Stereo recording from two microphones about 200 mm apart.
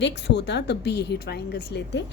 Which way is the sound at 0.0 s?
60° left (ahead or behind).